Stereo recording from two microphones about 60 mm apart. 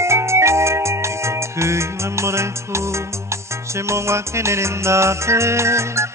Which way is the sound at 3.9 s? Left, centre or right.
Right.